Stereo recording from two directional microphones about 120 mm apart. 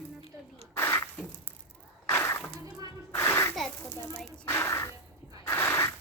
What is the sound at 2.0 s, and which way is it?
Music, 20° left (ahead or behind).